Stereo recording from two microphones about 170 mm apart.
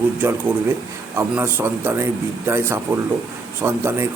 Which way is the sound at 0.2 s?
10° right (ahead or behind).